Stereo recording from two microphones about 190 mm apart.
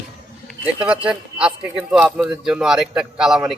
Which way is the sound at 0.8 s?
5° right (ahead or behind).